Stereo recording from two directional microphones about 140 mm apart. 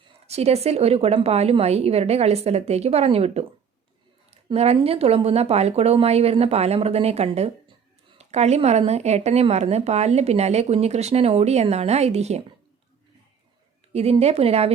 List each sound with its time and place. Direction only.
0.3 s a woman's voice: 50° right (ahead or behind)
4.5 s a woman's voice: 45° right (ahead or behind)
13.9 s a woman's voice: 45° right (ahead or behind)